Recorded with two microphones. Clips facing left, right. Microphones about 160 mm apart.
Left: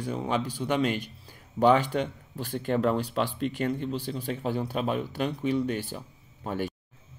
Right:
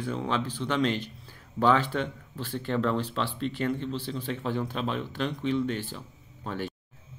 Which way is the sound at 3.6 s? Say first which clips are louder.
Right 1 dB; 45° left (ahead or behind).